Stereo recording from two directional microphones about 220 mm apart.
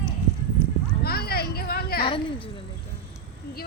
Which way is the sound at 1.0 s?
45° left (ahead or behind).